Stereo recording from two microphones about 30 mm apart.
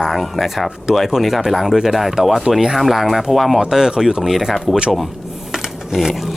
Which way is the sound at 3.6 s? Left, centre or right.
Centre.